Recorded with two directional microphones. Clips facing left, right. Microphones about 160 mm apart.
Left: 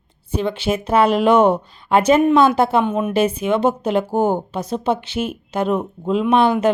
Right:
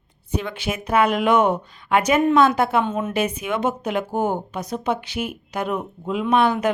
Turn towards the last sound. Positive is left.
turn(degrees=30)  # may be behind; listen again after turning